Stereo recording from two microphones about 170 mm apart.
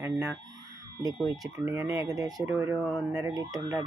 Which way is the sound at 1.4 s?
20° right (ahead or behind).